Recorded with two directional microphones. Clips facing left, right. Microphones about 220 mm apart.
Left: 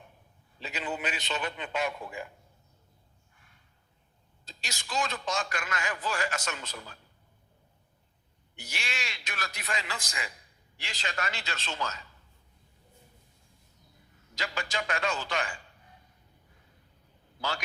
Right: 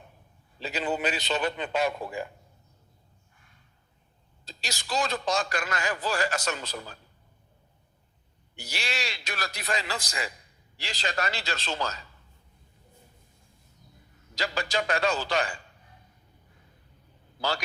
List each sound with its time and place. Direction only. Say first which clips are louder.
0.6 s a man's voice: right 6 dB; 35° right (ahead or behind)
4.4 s a man's voice: right 6 dB; 35° right (ahead or behind)
8.5 s a man's voice: right 5 dB; 35° right (ahead or behind)
14.3 s a man's voice: right 5 dB; 35° right (ahead or behind)